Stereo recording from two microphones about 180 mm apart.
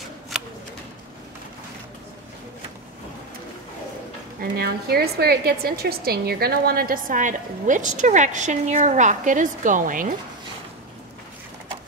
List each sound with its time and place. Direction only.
4.4 s a woman's voice: 60° right (ahead or behind)